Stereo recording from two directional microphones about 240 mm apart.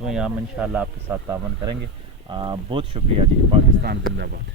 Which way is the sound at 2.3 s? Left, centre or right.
Centre.